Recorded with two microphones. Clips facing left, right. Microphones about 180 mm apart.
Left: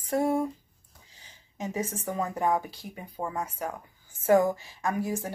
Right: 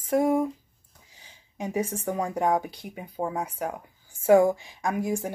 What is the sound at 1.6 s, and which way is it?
Speech, 15° right (ahead or behind).